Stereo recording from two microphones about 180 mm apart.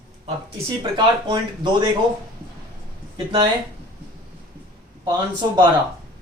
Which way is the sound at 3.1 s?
30° right (ahead or behind).